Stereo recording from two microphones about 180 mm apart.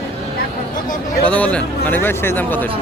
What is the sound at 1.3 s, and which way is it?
A man's voice, 5° left (ahead or behind).